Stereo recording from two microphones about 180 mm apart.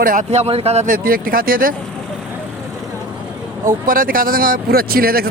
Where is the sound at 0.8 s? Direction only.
55° right (ahead or behind).